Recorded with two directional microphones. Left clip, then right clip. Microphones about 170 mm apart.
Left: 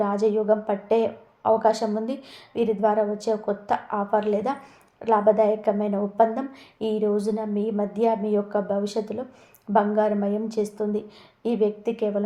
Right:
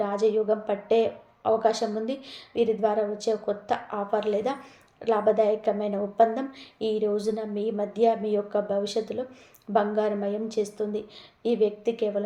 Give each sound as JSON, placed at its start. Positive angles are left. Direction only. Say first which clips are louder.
{"t": 0.0, "sound": "a woman's voice", "louder": "left 2 dB", "side_deg": 20}